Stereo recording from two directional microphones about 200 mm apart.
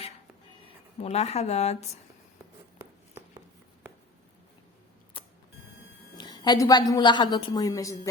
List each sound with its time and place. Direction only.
0.9 s a woman's voice: 30° left (ahead or behind)
5.2 s a sound: 25° left (ahead or behind)
6.1 s a woman's voice: 20° left (ahead or behind)